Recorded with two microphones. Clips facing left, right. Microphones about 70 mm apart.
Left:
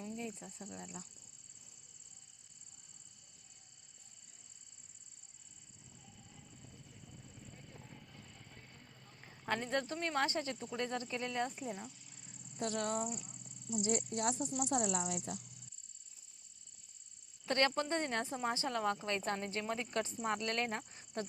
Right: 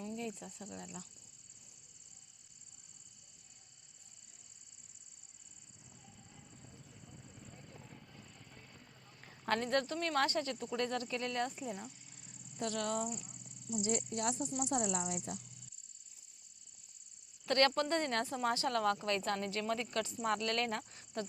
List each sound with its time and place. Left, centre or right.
0.4 s speech: centre
7.5 s vehicle: centre
8.8 s a sound: centre
9.5 s speech: centre
9.8 s speech: left
11.6 s cricket: centre
12.5 s speech: left
13.8 s speech: left
15.0 s speech: left
17.4 s speech: centre